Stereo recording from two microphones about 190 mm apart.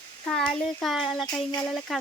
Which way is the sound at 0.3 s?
5° left (ahead or behind).